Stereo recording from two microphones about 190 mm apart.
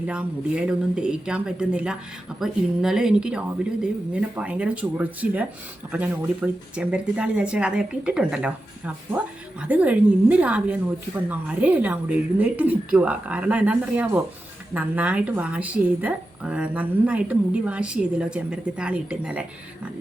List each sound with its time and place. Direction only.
0.1 s a woman's voice: 5° right (ahead or behind)